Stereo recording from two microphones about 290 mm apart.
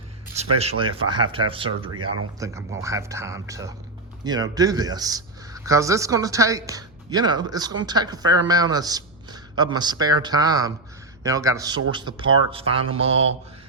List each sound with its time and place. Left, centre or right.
0.6 s speech: centre